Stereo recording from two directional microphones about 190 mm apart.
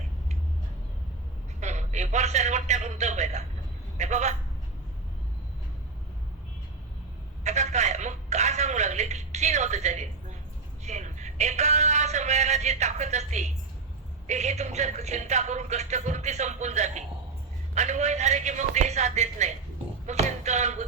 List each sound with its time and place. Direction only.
1.6 s a man's voice: 35° right (ahead or behind)
7.4 s telephone: 35° right (ahead or behind)
10.8 s speech: 40° right (ahead or behind)
20.1 s a sound: 35° right (ahead or behind)